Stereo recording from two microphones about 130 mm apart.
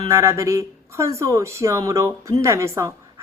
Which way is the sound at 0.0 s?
20° right (ahead or behind).